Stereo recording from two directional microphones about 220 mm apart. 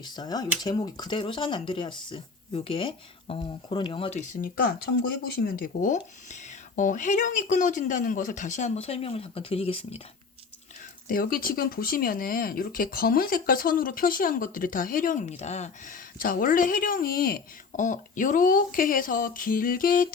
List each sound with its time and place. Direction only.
0.0 s speech: 20° left (ahead or behind)
11.1 s speech: 40° left (ahead or behind)